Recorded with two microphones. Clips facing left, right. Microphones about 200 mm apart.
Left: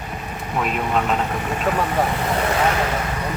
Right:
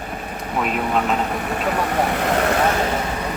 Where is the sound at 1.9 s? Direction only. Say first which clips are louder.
Right 1 dB; 70° right (ahead or behind).